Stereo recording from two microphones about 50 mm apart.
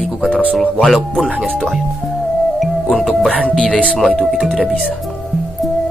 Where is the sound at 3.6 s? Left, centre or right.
Left.